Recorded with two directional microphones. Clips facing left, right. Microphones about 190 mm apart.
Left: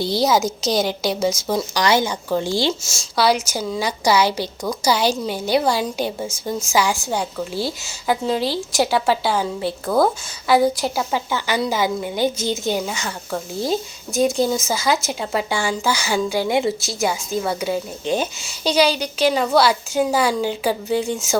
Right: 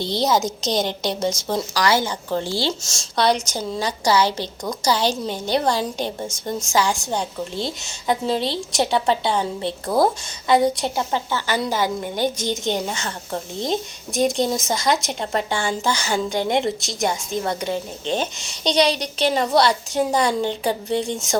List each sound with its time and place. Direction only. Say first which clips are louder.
0.0 s a woman's voice: left 2 dB; 5° left (ahead or behind)
1.7 s a woman's voice: left 1 dB; 20° left (ahead or behind)
2.9 s a woman's voice: even; 5° left (ahead or behind)